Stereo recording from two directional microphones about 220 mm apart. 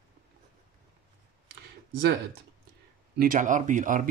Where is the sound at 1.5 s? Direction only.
50° right (ahead or behind).